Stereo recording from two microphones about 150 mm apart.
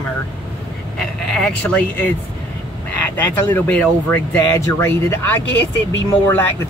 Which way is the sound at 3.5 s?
10° left (ahead or behind).